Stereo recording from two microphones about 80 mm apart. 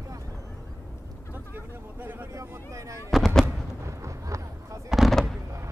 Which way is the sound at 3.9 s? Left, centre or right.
Right.